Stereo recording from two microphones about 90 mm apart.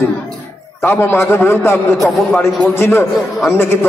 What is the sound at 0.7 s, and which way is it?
A man's voice, 30° left (ahead or behind).